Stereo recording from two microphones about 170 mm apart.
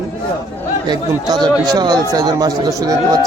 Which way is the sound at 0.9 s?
25° right (ahead or behind).